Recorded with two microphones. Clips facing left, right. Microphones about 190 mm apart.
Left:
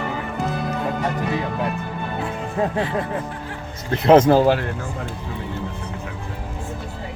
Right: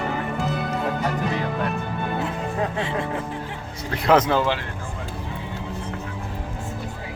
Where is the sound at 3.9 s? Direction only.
25° left (ahead or behind).